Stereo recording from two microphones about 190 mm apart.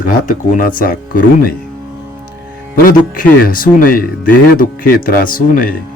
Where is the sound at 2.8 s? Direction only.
50° left (ahead or behind).